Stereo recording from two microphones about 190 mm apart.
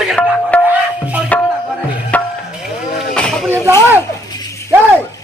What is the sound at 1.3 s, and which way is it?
Music, 10° left (ahead or behind).